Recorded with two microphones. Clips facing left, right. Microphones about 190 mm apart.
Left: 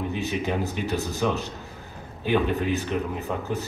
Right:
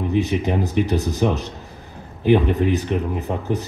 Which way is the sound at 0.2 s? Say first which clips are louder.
Right 5 dB; 15° right (ahead or behind).